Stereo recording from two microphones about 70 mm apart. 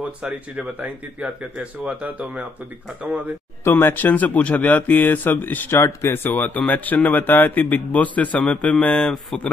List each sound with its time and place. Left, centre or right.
0.3 s speech: right
3.6 s a man's voice: left
5.8 s speech: left
6.3 s a man's voice: left